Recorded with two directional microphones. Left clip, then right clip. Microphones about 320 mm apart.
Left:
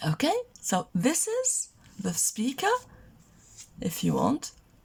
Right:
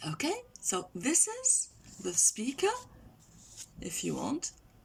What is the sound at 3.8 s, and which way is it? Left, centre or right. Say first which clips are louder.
Speech: left 8 dB; left.